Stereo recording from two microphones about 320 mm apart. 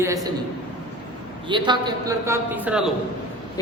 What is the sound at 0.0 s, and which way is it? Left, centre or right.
Speech, centre.